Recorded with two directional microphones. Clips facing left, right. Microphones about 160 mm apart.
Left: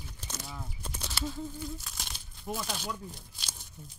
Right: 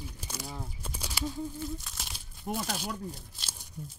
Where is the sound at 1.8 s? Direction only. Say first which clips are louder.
Even; centre (ahead or behind).